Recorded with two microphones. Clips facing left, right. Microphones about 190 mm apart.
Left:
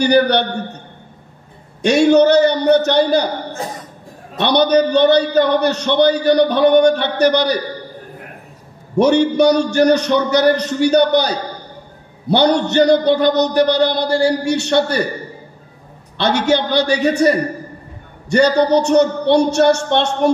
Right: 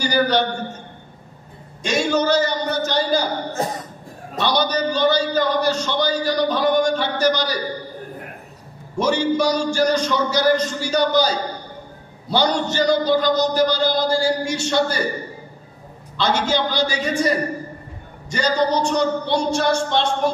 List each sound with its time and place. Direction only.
0.0 s a man's voice: 65° left (ahead or behind)
1.8 s a man's voice: 65° left (ahead or behind)
4.4 s a man's voice: 65° left (ahead or behind)
8.9 s a man's voice: 65° left (ahead or behind)
16.2 s a man's voice: 65° left (ahead or behind)